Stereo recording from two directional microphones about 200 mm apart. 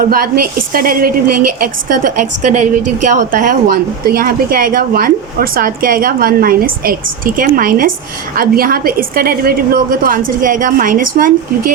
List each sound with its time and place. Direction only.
0.1 s speech: 45° right (ahead or behind)